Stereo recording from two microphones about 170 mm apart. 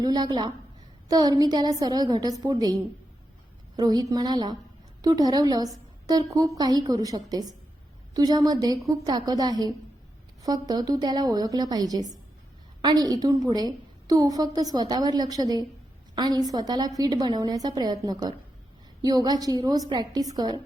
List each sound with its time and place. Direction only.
0.0 s a woman's voice: 25° right (ahead or behind)